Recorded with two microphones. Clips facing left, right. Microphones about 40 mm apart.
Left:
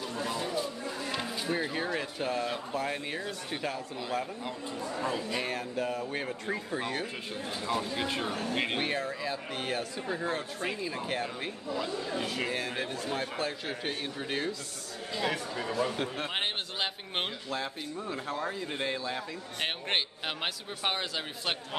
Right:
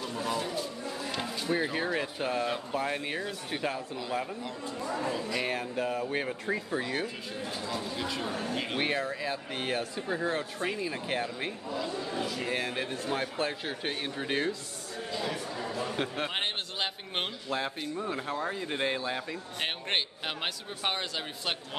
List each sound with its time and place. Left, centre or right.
0.1 s a sound: centre
1.5 s speech: centre
5.0 s speech: centre
5.4 s speech: centre
7.9 s speech: left
8.7 s a man's voice: centre
10.8 s speech: centre
12.4 s speech: centre
15.2 s speech: left
16.3 s a sound: centre
17.5 s speech: centre
19.6 s a man's voice: centre